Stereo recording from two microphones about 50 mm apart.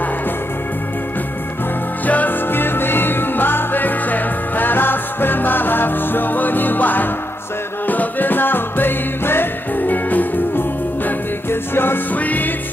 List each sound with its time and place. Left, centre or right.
2.0 s music: left
11.7 s music: left
12.1 s music: left